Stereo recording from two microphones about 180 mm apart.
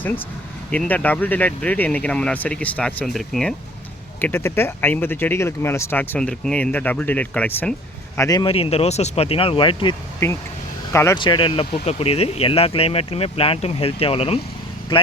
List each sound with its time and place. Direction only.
0.7 s speech: 10° left (ahead or behind)
4.2 s speech: 10° left (ahead or behind)
8.5 s speech: 35° left (ahead or behind); by 11.2 s 15° left (ahead or behind)
11.2 s speech: 25° left (ahead or behind)